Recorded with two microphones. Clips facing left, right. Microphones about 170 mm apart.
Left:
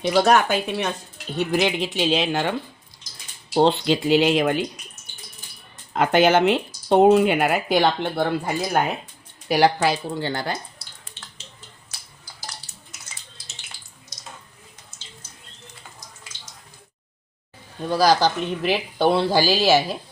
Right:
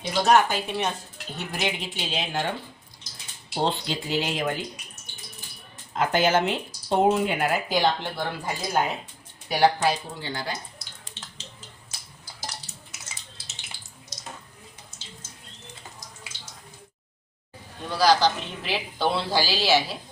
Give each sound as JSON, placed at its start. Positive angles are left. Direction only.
{"t": 0.0, "sound": "speech", "side_deg": 80}
{"t": 1.5, "sound": "speech", "side_deg": 90}
{"t": 3.5, "sound": "speech", "side_deg": 75}
{"t": 5.9, "sound": "speech", "side_deg": 70}
{"t": 9.5, "sound": "speech", "side_deg": 85}
{"t": 17.9, "sound": "speech", "side_deg": 45}